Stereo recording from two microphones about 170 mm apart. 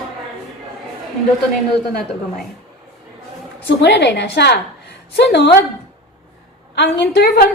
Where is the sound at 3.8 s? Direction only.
85° left.